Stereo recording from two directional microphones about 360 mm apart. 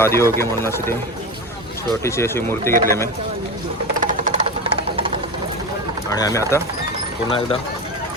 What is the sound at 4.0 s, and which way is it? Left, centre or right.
Music, centre.